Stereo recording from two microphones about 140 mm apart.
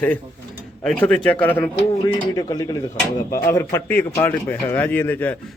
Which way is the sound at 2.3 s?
30° left (ahead or behind).